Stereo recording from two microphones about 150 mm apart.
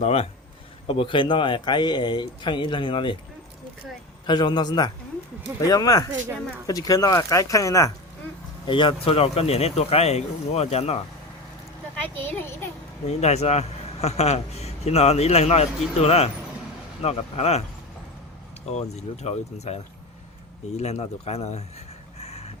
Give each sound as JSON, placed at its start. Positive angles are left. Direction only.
{"t": 0.0, "sound": "a man's voice", "side_deg": 45}
{"t": 4.3, "sound": "speech", "side_deg": 30}
{"t": 8.6, "sound": "a man's voice", "side_deg": 35}
{"t": 12.0, "sound": "a child's voice", "side_deg": 15}
{"t": 13.1, "sound": "a man's voice", "side_deg": 45}
{"t": 18.7, "sound": "a man's voice", "side_deg": 45}
{"t": 22.2, "sound": "vehicle", "side_deg": 45}